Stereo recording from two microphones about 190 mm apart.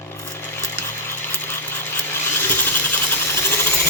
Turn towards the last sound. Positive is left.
turn(degrees=10)  # may be behind; listen again after turning